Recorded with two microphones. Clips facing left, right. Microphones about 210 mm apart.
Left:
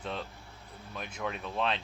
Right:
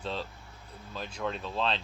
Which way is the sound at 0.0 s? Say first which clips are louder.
Right 2 dB; 25° right (ahead or behind).